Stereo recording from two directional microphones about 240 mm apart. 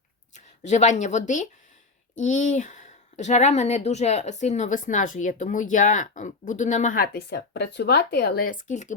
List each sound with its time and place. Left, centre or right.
0.3 s a woman's voice: left